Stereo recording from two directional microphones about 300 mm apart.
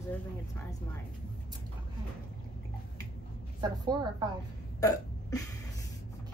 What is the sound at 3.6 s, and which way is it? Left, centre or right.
Speech, centre.